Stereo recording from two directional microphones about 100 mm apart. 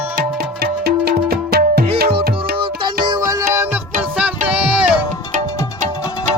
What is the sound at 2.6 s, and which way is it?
Music, 55° right (ahead or behind).